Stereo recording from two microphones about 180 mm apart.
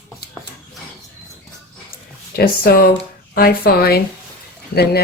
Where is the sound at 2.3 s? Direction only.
55° left (ahead or behind).